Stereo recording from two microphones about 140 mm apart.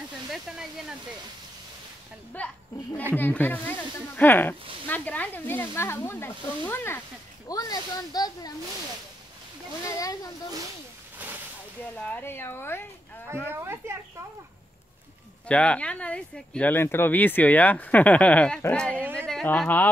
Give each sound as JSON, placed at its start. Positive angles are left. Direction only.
{"t": 0.3, "sound": "speech", "side_deg": -5}
{"t": 2.4, "sound": "speech", "side_deg": 10}
{"t": 7.4, "sound": "speech", "side_deg": 25}
{"t": 9.8, "sound": "speech", "side_deg": 25}
{"t": 12.0, "sound": "speech", "side_deg": 15}
{"t": 13.5, "sound": "speech", "side_deg": -15}
{"t": 15.4, "sound": "speech", "side_deg": 10}